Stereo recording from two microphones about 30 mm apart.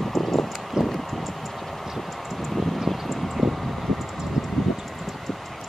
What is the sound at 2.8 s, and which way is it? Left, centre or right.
Vehicle, centre.